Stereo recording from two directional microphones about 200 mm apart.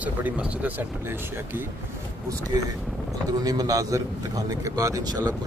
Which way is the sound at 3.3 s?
20° right (ahead or behind).